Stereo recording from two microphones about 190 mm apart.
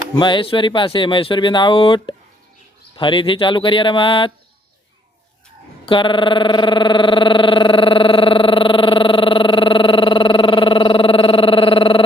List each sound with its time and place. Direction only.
0.2 s speech: 25° left (ahead or behind)
5.8 s speech: 25° left (ahead or behind)